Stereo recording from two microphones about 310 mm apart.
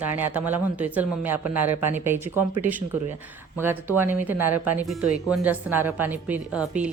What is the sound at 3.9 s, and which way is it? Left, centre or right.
Speech, centre.